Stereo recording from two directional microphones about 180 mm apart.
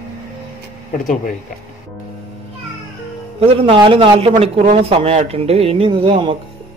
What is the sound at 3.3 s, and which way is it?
A man's voice, 30° right (ahead or behind).